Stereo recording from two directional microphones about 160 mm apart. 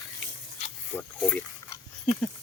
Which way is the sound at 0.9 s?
10° left (ahead or behind).